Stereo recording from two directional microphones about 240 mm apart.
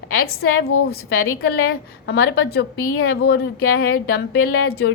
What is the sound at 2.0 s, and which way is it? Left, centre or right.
A woman's voice, left.